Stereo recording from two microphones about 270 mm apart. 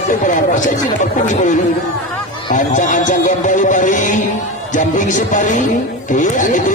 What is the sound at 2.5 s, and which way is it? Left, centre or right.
Speech, left.